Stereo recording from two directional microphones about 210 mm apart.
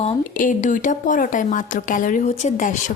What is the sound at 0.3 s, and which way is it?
Speech, 40° left (ahead or behind).